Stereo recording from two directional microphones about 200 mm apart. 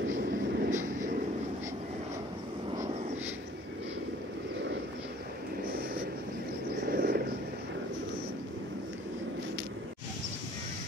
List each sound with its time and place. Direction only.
0.2 s vehicle: 40° right (ahead or behind)
5.7 s vehicle: 45° right (ahead or behind)
6.9 s a sound: 45° right (ahead or behind)